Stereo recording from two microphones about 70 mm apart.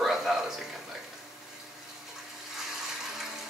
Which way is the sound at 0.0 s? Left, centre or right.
Centre.